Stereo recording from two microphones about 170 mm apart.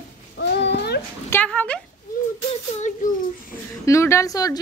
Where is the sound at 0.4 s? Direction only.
90° left.